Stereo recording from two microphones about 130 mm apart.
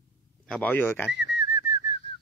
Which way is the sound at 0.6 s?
15° left (ahead or behind).